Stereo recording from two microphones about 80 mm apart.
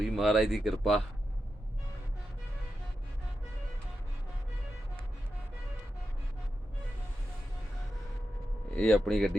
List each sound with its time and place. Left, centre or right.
0.0 s speech: centre
8.8 s speech: centre